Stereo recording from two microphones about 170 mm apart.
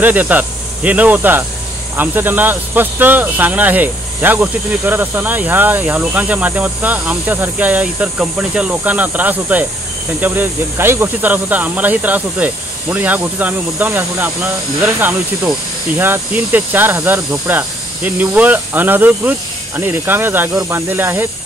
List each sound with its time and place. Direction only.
0.0 s speech: 10° right (ahead or behind)